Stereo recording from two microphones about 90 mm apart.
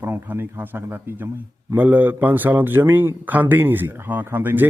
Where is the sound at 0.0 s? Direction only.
25° right (ahead or behind).